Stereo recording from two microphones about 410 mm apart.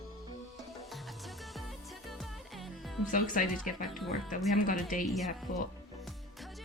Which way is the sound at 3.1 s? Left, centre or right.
Centre.